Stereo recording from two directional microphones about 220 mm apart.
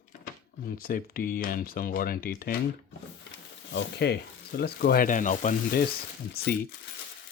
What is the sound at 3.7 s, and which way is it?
Speech, 50° left (ahead or behind).